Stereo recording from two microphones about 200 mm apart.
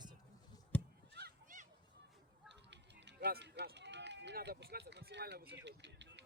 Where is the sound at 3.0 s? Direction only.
60° right (ahead or behind).